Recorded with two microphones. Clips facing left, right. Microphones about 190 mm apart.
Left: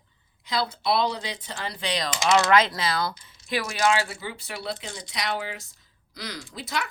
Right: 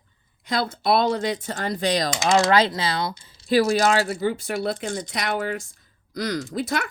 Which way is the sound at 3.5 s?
35° right (ahead or behind).